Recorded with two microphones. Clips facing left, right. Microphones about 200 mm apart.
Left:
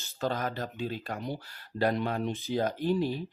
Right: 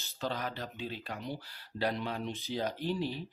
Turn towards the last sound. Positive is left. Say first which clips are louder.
# left 6 dB
turn(degrees=50)  # may be behind; listen again after turning